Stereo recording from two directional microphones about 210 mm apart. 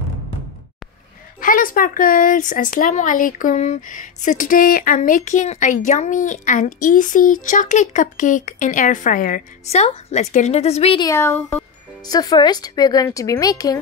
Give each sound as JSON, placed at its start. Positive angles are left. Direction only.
{"t": 1.4, "sound": "speech", "side_deg": 40}
{"t": 11.1, "sound": "a child's voice", "side_deg": 10}